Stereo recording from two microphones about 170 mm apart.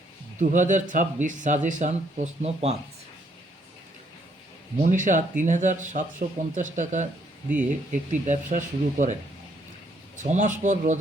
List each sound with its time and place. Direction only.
0.3 s speech: 50° right (ahead or behind)
4.8 s speech: 50° right (ahead or behind)
8.3 s speech: 50° right (ahead or behind)
10.2 s speech: 45° right (ahead or behind)